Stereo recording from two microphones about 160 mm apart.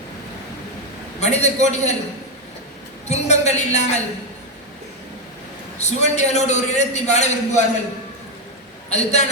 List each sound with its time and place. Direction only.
1.2 s a man's voice: 45° left (ahead or behind)
3.1 s a man's voice: 45° left (ahead or behind)
5.8 s a man's voice: 45° left (ahead or behind)
8.9 s a man's voice: 45° left (ahead or behind)